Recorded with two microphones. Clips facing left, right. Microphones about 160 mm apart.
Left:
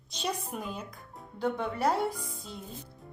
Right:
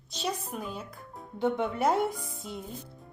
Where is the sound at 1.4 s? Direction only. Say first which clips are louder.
Right 3 dB; 20° right (ahead or behind).